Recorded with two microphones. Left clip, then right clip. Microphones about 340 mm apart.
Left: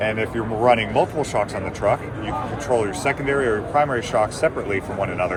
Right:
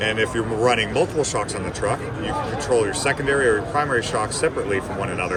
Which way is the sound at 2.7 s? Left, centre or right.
Centre.